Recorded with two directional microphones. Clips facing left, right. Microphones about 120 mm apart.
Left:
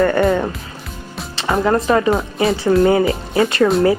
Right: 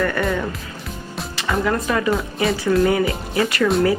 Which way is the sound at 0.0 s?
35° left (ahead or behind).